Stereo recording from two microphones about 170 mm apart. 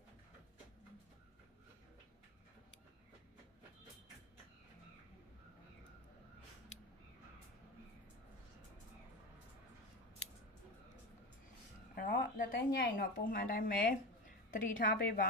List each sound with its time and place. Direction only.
11.9 s a woman's voice: 65° left (ahead or behind)